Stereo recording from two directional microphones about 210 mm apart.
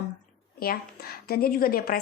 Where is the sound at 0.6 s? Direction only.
45° left (ahead or behind).